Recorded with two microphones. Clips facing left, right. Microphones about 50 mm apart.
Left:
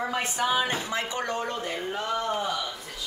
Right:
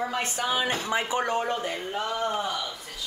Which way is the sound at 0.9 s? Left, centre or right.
Centre.